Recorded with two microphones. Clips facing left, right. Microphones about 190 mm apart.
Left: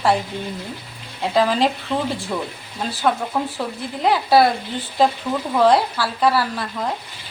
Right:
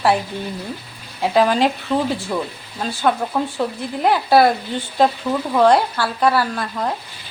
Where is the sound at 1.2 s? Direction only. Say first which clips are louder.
Right 2 dB; centre (ahead or behind).